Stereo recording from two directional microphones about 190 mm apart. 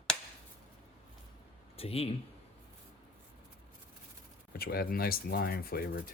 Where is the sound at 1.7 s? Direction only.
30° left (ahead or behind).